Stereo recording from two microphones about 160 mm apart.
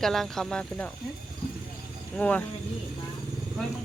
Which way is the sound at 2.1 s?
10° left (ahead or behind).